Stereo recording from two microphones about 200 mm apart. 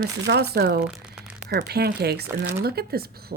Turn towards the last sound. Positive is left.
turn(degrees=-50)  # may be behind; listen again after turning